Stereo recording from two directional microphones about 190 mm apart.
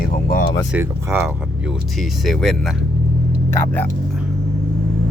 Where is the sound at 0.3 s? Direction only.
45° left (ahead or behind).